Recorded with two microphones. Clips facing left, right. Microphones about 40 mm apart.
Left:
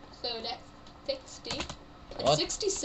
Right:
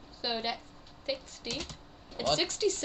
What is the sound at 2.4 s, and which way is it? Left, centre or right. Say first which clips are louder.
Speech: right 2 dB; right.